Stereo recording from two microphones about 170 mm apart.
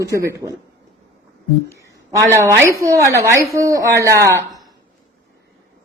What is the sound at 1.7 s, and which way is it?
A woman's voice, 15° right (ahead or behind).